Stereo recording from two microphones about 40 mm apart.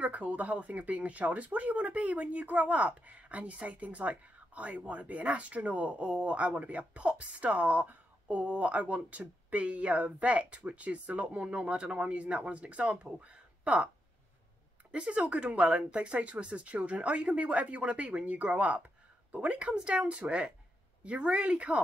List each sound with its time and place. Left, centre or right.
0.0 s speech: right
14.9 s a woman's voice: right